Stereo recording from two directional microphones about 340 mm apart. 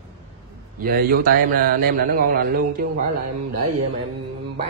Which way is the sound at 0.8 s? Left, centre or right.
Right.